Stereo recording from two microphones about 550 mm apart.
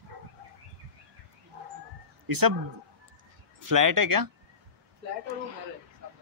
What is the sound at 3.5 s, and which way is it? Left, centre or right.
Speech, right.